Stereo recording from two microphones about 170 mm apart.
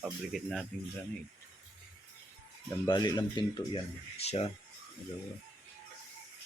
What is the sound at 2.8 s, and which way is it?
Speech, 25° left (ahead or behind).